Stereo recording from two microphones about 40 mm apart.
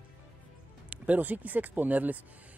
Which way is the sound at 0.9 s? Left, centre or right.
Right.